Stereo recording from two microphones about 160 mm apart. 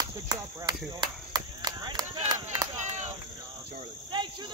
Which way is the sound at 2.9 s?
45° right (ahead or behind).